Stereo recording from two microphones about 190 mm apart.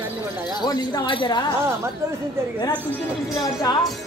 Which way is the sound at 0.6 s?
20° left (ahead or behind).